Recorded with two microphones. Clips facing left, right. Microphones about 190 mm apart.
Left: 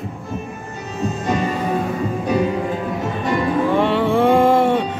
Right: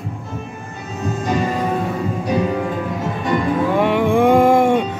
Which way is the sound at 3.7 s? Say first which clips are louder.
Right 2 dB; 10° right (ahead or behind).